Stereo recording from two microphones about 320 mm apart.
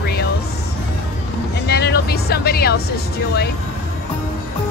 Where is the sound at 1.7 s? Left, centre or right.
Left.